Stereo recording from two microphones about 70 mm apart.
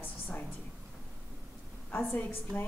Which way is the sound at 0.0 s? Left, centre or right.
Left.